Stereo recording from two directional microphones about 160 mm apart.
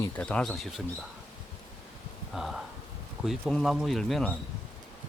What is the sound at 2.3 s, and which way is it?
Speech, centre (ahead or behind).